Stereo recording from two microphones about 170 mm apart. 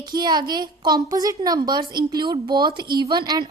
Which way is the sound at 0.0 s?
25° right (ahead or behind).